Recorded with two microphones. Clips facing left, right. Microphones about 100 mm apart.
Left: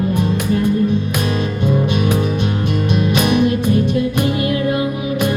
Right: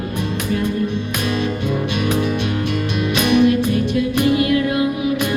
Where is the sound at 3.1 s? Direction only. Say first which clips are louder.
Right 3 dB; 40° left (ahead or behind).